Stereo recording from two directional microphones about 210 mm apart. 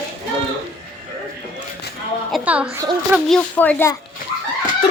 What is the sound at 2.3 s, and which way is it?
A woman's voice, 5° right (ahead or behind).